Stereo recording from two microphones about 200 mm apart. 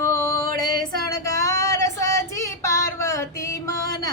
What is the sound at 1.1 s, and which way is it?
Female singing, 15° left (ahead or behind).